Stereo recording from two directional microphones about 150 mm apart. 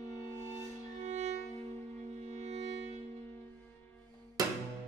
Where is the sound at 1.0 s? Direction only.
50° right (ahead or behind).